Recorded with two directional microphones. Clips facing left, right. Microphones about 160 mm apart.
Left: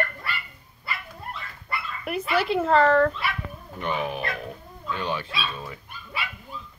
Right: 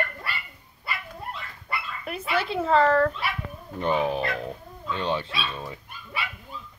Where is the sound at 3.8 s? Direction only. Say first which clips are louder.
Right 4 dB; 30° right (ahead or behind).